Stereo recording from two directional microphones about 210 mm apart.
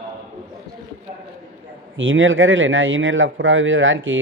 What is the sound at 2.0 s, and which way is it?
Speech, 70° right (ahead or behind).